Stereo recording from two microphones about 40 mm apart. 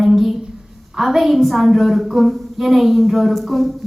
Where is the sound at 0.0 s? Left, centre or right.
Centre.